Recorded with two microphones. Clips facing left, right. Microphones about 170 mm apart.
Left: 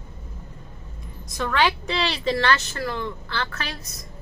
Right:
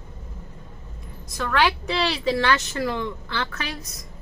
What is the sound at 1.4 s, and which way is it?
Speech, 5° right (ahead or behind).